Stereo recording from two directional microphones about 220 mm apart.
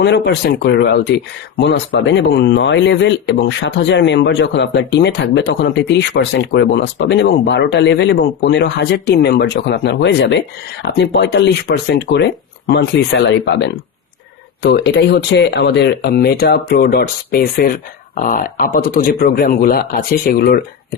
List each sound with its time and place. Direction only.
0.0 s speech: 50° left (ahead or behind)